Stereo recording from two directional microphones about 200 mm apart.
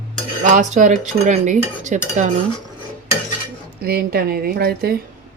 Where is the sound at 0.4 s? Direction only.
40° right (ahead or behind).